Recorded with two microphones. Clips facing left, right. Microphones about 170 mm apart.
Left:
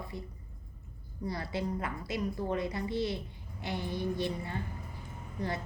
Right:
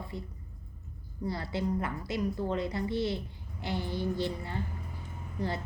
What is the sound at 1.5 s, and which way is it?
A woman's voice, 20° left (ahead or behind).